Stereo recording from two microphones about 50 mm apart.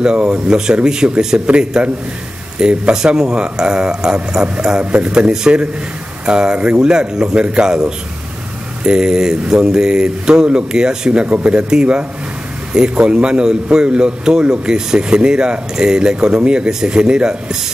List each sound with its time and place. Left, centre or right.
0.0 s a man's voice: centre